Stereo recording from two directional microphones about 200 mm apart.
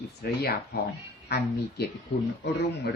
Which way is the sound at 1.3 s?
55° left (ahead or behind).